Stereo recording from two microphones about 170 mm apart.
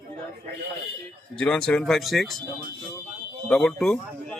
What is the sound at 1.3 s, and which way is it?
Speech, 5° left (ahead or behind).